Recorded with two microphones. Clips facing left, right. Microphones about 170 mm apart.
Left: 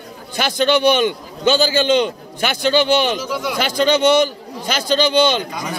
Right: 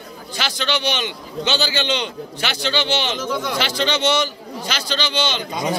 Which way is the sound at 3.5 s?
50° left (ahead or behind).